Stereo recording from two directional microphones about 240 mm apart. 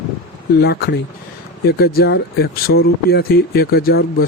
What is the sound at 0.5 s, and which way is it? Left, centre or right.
Speech, left.